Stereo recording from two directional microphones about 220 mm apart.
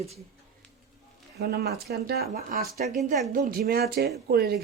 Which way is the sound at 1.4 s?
45° right (ahead or behind).